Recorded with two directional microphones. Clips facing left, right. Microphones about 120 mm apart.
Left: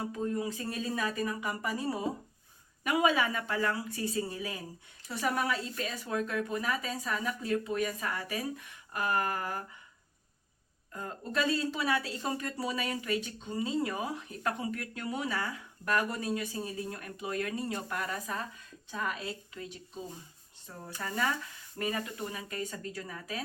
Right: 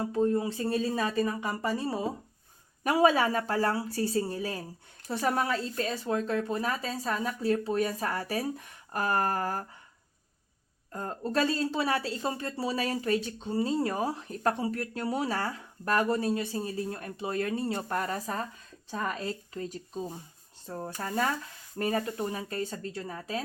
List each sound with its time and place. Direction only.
0.1 s speech: 35° right (ahead or behind)
10.9 s speech: 40° right (ahead or behind)